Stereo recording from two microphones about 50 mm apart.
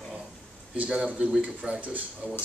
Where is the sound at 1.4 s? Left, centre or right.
Right.